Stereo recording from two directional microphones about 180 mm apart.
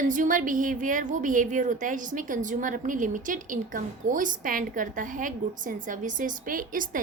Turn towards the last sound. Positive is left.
turn(degrees=-50)  # may be behind; listen again after turning